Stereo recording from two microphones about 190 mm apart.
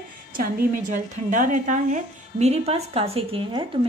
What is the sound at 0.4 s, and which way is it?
Speech, 45° right (ahead or behind).